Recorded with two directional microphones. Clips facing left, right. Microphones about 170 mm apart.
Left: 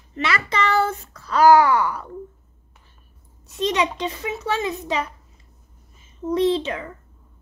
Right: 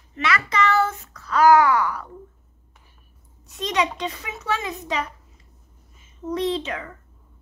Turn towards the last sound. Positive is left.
turn(degrees=30)  # may be behind; listen again after turning